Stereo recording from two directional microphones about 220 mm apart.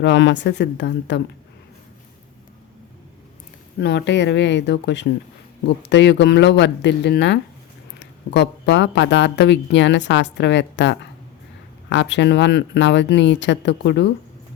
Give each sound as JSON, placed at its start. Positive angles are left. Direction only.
{"t": 0.0, "sound": "a woman's voice", "side_deg": 50}
{"t": 3.8, "sound": "a woman's voice", "side_deg": 50}